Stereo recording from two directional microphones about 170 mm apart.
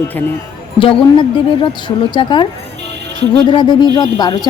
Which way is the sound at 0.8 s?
30° left (ahead or behind).